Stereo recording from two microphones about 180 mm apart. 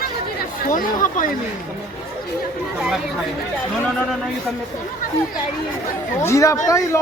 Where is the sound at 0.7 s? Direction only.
45° left (ahead or behind).